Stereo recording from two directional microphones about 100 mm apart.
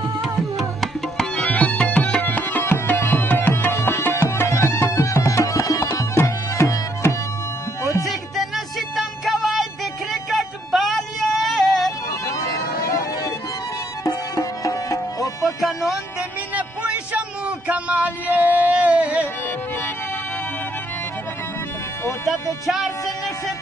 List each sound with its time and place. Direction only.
0.2 s tabla: centre (ahead or behind); by 3.7 s 20° left (ahead or behind)
3.7 s music: 20° left (ahead or behind)
8.0 s music: centre (ahead or behind)
14.0 s music: 35° left (ahead or behind)
15.4 s music: centre (ahead or behind)
16.5 s music: 15° right (ahead or behind)